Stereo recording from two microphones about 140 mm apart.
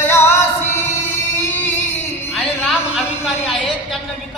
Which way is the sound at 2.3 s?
5° right (ahead or behind).